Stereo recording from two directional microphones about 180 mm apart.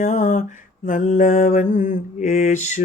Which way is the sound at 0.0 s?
40° left (ahead or behind).